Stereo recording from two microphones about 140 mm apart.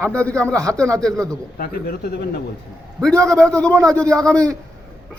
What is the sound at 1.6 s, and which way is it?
Speech, 90° left.